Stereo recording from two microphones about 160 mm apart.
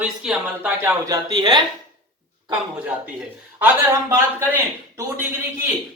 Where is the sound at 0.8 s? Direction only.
25° right (ahead or behind).